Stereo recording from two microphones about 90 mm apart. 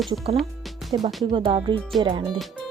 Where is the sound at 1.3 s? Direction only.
80° right.